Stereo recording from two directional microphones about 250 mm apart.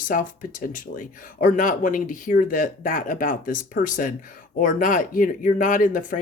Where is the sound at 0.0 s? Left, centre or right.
Left.